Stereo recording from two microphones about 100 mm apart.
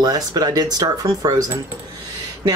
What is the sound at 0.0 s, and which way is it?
Speech, 40° right (ahead or behind).